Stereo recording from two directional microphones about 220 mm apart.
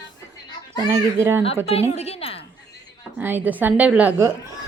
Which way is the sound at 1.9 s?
30° left (ahead or behind).